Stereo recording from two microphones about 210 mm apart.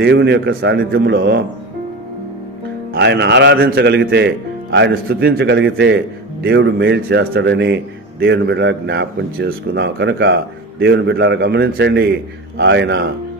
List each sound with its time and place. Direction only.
0.0 s speech: 55° right (ahead or behind)
2.9 s speech: 55° right (ahead or behind)